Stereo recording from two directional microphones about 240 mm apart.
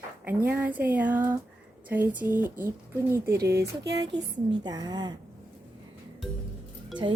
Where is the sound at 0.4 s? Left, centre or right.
Centre.